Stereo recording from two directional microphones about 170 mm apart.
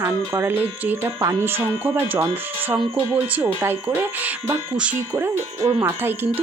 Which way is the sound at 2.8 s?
30° right (ahead or behind).